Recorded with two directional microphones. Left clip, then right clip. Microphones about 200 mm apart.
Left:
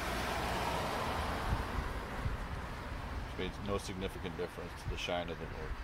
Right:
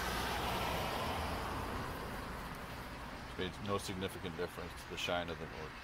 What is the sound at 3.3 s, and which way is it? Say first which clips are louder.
Speech: even; 25° right (ahead or behind).